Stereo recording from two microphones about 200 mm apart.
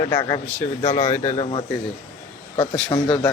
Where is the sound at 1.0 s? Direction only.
15° left (ahead or behind).